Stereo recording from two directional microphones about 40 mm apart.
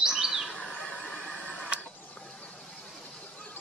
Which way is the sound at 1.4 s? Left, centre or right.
Left.